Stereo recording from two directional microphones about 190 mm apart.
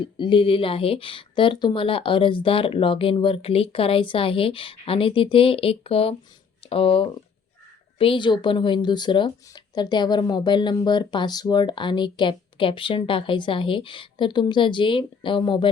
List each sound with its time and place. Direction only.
0.0 s a woman's voice: 25° left (ahead or behind)